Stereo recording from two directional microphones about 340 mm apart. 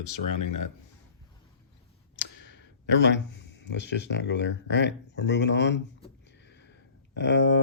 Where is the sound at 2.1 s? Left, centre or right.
Left.